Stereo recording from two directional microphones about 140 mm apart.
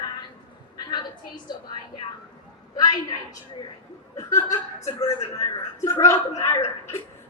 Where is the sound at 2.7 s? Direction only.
30° left (ahead or behind).